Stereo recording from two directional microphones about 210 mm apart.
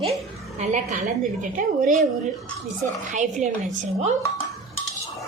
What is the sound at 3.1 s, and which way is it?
A woman's voice, 35° right (ahead or behind).